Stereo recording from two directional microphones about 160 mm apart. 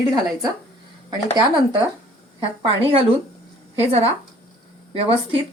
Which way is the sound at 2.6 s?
35° right (ahead or behind).